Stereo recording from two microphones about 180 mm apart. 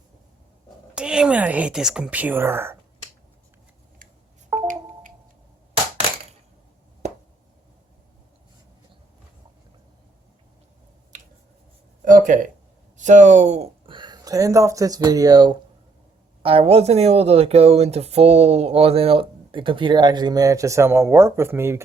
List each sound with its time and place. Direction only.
0.9 s a woman's voice: 5° right (ahead or behind)
12.0 s a sound: 45° right (ahead or behind)
13.0 s speech: 40° right (ahead or behind); by 21.8 s 15° right (ahead or behind)